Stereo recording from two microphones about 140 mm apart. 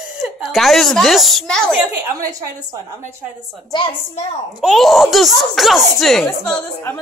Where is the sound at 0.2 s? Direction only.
Centre (ahead or behind).